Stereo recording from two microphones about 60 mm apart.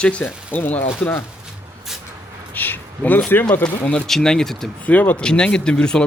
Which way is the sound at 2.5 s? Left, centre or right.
Left.